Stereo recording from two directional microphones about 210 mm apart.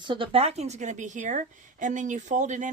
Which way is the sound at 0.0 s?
25° right (ahead or behind).